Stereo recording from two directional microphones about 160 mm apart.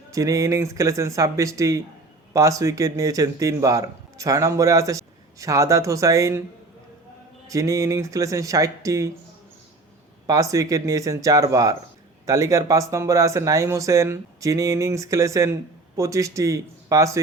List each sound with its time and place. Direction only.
0.1 s speech: 20° right (ahead or behind)
7.4 s speech: 20° right (ahead or behind)
10.2 s speech: 20° right (ahead or behind)